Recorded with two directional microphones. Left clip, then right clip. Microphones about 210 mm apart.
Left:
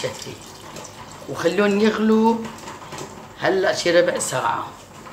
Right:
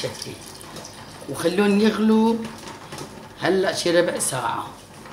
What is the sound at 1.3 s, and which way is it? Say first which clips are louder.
Speech: left 2 dB; 35° right (ahead or behind).